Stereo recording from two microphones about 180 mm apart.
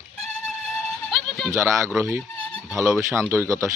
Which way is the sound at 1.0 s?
Centre (ahead or behind).